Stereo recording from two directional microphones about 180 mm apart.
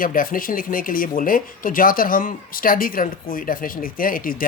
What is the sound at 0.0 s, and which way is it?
Speech, 50° left (ahead or behind).